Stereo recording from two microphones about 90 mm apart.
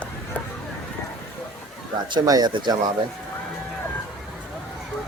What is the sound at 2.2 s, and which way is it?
Speech, 45° right (ahead or behind).